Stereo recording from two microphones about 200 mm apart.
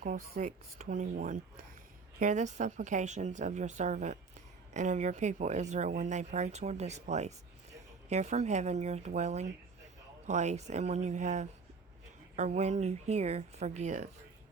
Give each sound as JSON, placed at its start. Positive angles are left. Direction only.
{"t": 0.0, "sound": "speech", "side_deg": -40}